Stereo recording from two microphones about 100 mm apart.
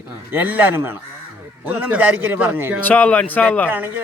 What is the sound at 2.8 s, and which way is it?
Speech, 15° left (ahead or behind).